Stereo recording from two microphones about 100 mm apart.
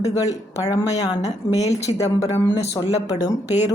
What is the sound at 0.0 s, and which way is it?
A woman's voice, 35° left (ahead or behind).